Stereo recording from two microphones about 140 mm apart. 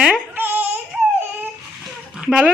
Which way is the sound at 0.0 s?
10° right (ahead or behind).